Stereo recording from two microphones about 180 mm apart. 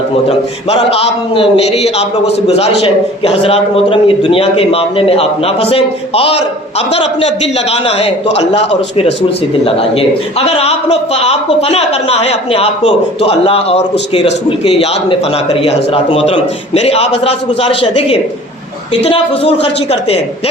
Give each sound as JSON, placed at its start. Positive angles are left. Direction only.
{"t": 0.3, "sound": "a man's voice", "side_deg": 35}
{"t": 7.7, "sound": "a man's voice", "side_deg": 35}
{"t": 9.6, "sound": "a man's voice", "side_deg": 30}